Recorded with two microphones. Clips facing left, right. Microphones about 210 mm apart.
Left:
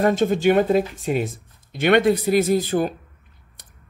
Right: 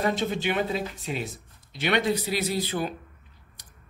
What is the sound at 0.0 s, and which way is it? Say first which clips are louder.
Speech: left 9 dB; 45° left (ahead or behind).